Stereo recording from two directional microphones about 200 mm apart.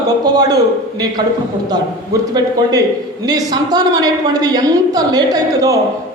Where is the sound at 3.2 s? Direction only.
20° right (ahead or behind).